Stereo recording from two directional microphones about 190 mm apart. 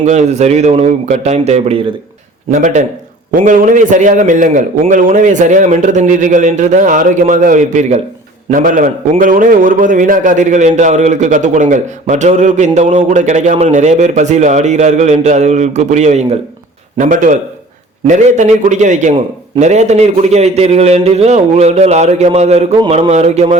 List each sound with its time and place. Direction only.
0.0 s a man's voice: 40° right (ahead or behind)